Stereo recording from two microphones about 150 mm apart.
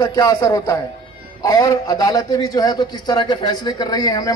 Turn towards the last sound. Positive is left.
turn(degrees=25)  # may be behind; listen again after turning